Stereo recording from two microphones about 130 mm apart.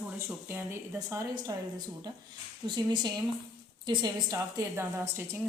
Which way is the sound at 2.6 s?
35° right (ahead or behind).